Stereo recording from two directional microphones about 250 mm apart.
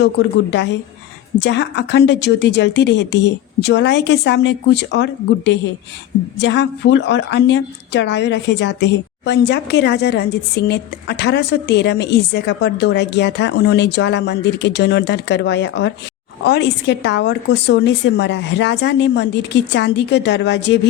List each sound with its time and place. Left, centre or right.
0.0 s a woman's voice: left